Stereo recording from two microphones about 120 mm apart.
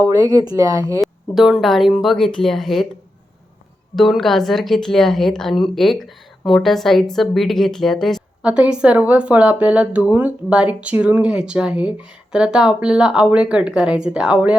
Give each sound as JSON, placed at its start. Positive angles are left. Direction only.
{"t": 0.1, "sound": "speech", "side_deg": -30}
{"t": 1.0, "sound": "a woman's voice", "side_deg": 0}
{"t": 3.9, "sound": "a woman's voice", "side_deg": 0}
{"t": 8.4, "sound": "speech", "side_deg": -10}